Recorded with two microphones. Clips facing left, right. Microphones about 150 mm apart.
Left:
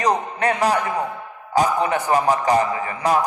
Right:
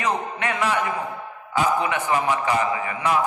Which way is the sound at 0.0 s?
40° left (ahead or behind).